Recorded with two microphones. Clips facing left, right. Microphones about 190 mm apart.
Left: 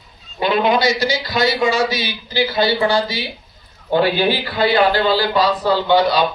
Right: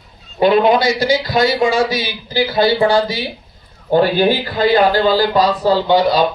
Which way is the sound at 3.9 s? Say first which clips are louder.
Right 3 dB; 45° right (ahead or behind).